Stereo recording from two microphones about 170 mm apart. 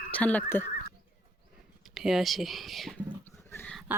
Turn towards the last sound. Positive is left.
turn(degrees=15)  # may be behind; listen again after turning